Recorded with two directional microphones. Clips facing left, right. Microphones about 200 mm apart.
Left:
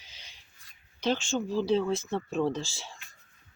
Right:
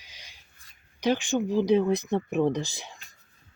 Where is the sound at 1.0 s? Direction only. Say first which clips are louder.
Right 4 dB; 15° right (ahead or behind).